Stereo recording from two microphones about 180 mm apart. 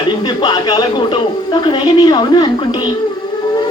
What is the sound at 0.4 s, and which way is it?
A woman's voice, 25° left (ahead or behind).